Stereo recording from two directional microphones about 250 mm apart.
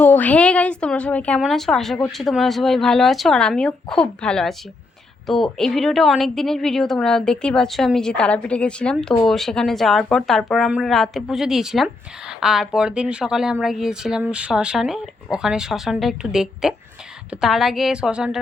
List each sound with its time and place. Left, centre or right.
0.0 s a woman's voice: centre